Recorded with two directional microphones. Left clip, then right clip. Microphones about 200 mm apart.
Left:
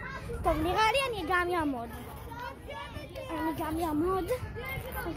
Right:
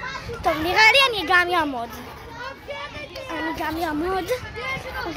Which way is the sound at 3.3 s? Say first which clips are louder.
Right 6 dB; centre (ahead or behind).